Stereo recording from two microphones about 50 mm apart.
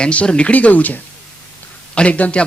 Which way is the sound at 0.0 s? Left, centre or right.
Left.